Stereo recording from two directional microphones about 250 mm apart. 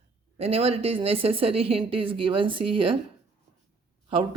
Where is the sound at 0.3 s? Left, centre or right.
Right.